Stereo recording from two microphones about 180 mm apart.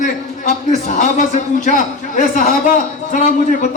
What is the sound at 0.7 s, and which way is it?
A man's voice, 40° left (ahead or behind).